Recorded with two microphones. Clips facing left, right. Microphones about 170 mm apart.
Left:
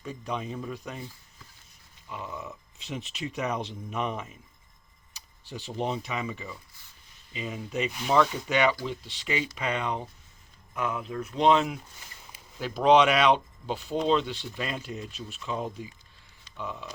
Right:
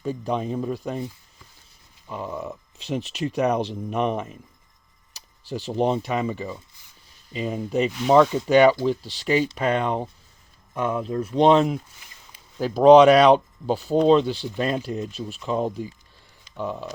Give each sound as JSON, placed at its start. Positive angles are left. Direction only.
{"t": 0.0, "sound": "speech", "side_deg": -35}
{"t": 2.0, "sound": "speech", "side_deg": -40}
{"t": 5.1, "sound": "a sound", "side_deg": -40}
{"t": 6.0, "sound": "speech", "side_deg": -45}